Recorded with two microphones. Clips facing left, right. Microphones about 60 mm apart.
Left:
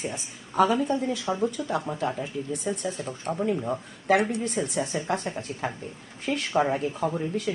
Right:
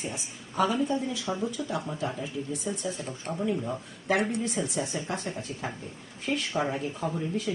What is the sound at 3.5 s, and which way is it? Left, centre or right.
Speech, centre.